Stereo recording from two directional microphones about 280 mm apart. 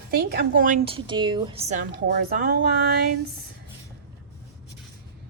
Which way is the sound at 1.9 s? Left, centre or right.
Right.